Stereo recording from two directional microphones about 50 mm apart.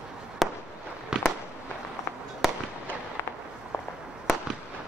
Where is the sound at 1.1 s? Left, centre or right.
Centre.